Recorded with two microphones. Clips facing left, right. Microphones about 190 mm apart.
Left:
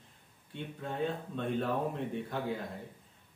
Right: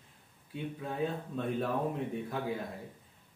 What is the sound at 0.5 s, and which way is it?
Speech, 5° right (ahead or behind).